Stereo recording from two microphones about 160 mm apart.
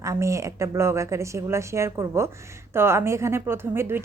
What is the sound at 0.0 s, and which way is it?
A woman's voice, 20° right (ahead or behind).